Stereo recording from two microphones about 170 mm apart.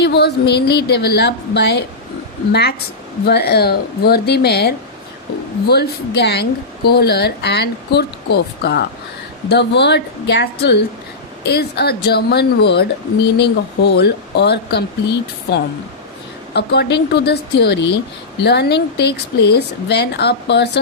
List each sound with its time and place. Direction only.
0.0 s speech: 75° left (ahead or behind)
9.5 s speech: 85° left